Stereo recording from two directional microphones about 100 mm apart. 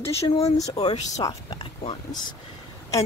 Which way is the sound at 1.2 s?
40° left (ahead or behind).